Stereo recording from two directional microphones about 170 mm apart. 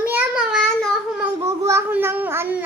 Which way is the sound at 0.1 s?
10° right (ahead or behind).